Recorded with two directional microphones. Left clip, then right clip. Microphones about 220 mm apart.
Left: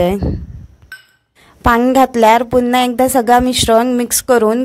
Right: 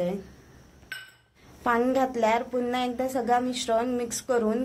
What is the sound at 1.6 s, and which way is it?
A woman's voice, 50° left (ahead or behind).